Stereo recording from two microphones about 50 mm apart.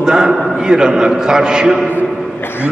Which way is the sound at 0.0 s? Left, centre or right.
Centre.